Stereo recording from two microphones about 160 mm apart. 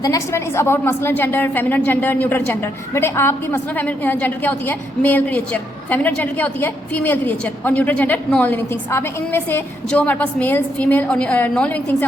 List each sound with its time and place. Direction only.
0.0 s a woman's voice: 20° left (ahead or behind)